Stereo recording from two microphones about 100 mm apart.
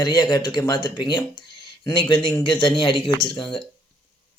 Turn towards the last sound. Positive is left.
turn(degrees=50)  # may be behind; listen again after turning